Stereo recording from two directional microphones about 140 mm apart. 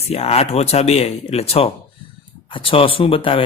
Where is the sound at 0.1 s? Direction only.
45° left (ahead or behind).